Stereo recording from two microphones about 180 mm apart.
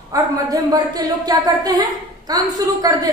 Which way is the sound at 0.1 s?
20° right (ahead or behind).